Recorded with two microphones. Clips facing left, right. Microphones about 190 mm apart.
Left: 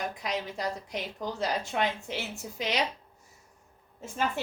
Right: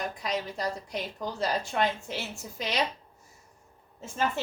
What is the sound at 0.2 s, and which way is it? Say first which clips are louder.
A woman's voice: right 1 dB; 15° left (ahead or behind).